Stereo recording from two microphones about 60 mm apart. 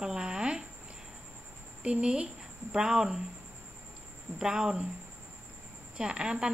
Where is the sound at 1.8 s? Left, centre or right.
Centre.